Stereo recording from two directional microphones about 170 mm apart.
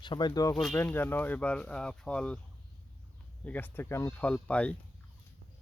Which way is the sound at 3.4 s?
10° left (ahead or behind).